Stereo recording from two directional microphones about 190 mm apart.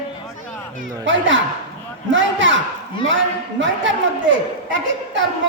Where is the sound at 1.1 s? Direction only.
80° right.